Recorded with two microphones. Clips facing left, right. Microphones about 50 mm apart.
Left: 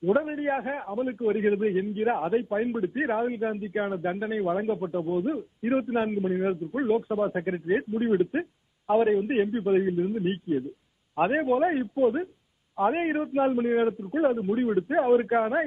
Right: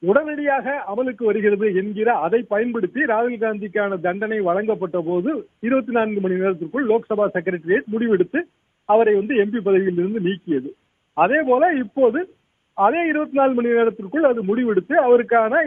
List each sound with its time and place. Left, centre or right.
0.0 s a man's voice: right